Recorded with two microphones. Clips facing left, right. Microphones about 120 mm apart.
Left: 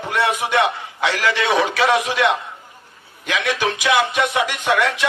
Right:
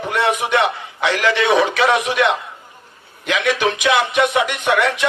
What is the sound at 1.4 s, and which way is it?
Music, 25° right (ahead or behind).